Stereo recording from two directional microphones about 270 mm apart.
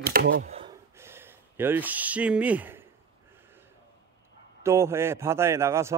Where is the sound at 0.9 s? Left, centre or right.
Centre.